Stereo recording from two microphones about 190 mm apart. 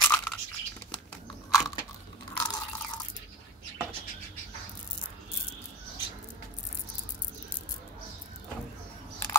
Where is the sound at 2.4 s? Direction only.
20° left (ahead or behind).